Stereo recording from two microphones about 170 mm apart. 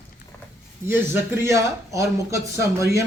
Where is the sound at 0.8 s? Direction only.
15° right (ahead or behind).